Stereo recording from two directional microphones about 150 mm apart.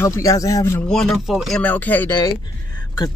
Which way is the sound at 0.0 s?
20° left (ahead or behind).